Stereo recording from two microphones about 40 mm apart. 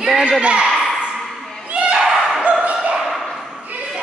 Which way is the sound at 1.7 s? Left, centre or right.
Right.